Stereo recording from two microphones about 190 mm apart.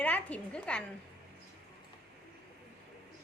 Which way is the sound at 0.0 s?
5° left (ahead or behind).